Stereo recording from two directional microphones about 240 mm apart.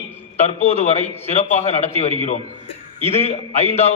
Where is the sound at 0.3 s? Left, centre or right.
Left.